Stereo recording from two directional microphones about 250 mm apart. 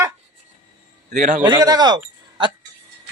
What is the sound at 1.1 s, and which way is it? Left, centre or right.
Speech, right.